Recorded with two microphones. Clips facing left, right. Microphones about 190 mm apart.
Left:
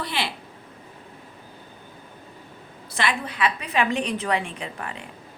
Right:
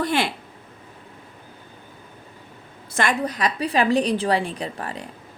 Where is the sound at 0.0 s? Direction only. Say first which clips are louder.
Right 7 dB; 50° right (ahead or behind).